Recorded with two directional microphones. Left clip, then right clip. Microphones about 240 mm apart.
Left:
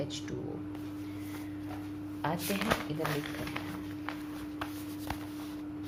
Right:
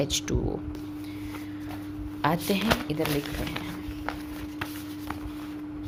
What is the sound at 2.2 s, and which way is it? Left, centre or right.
Speech, right.